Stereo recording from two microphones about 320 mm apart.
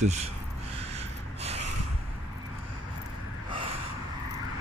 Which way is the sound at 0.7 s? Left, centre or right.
Centre.